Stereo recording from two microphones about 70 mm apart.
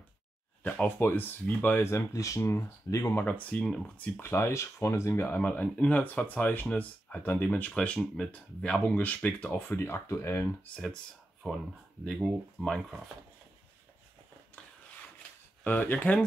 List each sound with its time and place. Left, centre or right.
0.7 s speech: left
2.1 s speech: left
3.3 s speech: centre
4.2 s speech: left
5.3 s speech: left
9.6 s speech: left
11.4 s speech: centre
15.6 s speech: left